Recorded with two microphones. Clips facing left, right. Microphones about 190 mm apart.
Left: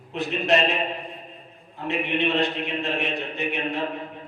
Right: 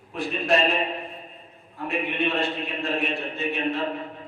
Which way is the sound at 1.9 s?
20° left (ahead or behind).